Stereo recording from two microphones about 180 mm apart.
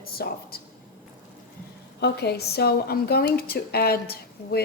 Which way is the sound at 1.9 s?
65° left (ahead or behind).